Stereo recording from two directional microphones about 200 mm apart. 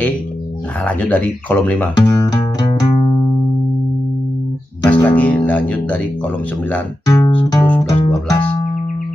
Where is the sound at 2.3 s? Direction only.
20° left (ahead or behind).